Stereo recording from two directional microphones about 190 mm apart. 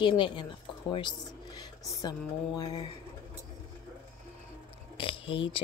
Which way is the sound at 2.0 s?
20° left (ahead or behind).